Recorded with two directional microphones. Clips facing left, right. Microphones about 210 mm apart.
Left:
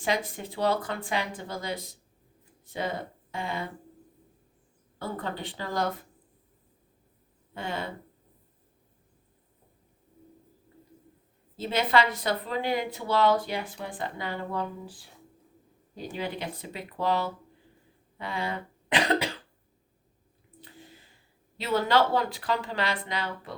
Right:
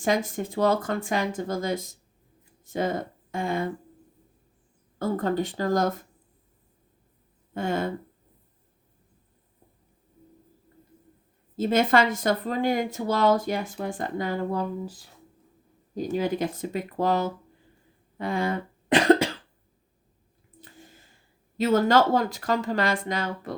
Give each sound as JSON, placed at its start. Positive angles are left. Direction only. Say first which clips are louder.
{"t": 0.0, "sound": "speech", "louder": "right 5 dB", "side_deg": -45}
{"t": 4.9, "sound": "speech", "louder": "right 9 dB", "side_deg": -45}
{"t": 7.5, "sound": "speech", "louder": "right 7 dB", "side_deg": -45}
{"t": 11.5, "sound": "speech", "louder": "right 4 dB", "side_deg": -45}
{"t": 20.6, "sound": "a sound", "louder": "even", "side_deg": -45}
{"t": 21.6, "sound": "speech", "louder": "right 4 dB", "side_deg": -45}